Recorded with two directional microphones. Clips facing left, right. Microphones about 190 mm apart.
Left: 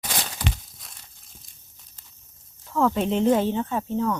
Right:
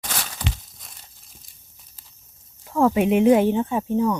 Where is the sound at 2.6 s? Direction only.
15° right (ahead or behind).